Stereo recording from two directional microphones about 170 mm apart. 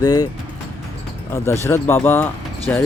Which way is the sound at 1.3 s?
15° left (ahead or behind).